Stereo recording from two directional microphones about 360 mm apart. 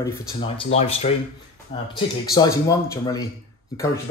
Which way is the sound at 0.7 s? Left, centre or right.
Centre.